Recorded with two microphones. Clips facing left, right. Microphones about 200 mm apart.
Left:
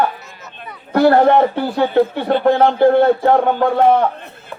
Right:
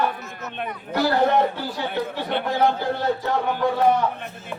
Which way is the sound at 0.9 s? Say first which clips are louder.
Left 8 dB; 60° left (ahead or behind).